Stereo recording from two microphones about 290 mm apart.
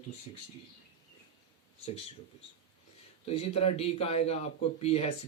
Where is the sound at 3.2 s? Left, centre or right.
Left.